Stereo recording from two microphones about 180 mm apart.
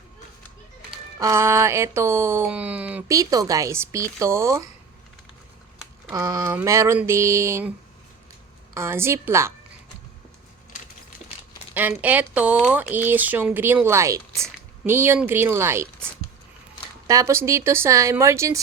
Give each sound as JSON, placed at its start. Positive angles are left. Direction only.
{"t": 1.2, "sound": "speech", "side_deg": -15}
{"t": 3.2, "sound": "speech", "side_deg": -20}
{"t": 6.1, "sound": "speech", "side_deg": -20}
{"t": 8.7, "sound": "speech", "side_deg": -15}
{"t": 11.7, "sound": "speech", "side_deg": -10}
{"t": 17.1, "sound": "speech", "side_deg": -15}